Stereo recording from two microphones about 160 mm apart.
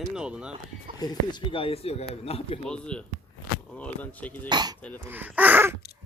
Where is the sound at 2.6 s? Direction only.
5° left (ahead or behind).